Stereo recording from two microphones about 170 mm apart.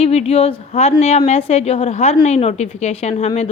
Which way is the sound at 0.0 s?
35° left (ahead or behind).